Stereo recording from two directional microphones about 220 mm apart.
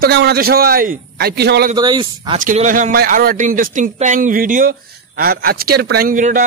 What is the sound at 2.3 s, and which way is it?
Speech, 35° right (ahead or behind).